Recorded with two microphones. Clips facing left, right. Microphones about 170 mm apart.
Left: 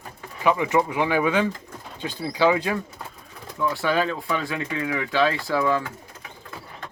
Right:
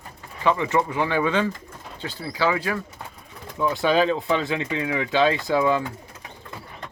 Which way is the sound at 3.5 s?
20° right (ahead or behind).